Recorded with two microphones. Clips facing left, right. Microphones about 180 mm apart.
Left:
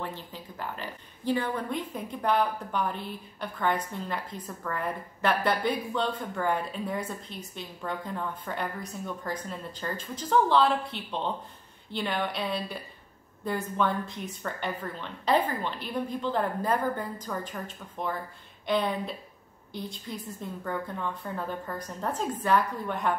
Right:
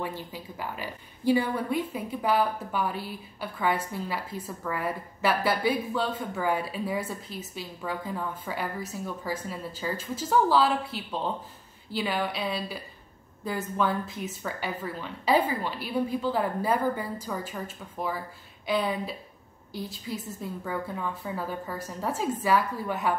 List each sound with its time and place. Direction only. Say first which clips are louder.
0.0 s a woman's voice: right 3 dB; 10° right (ahead or behind)